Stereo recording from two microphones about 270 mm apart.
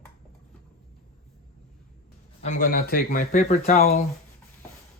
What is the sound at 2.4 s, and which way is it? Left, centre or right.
Speech, left.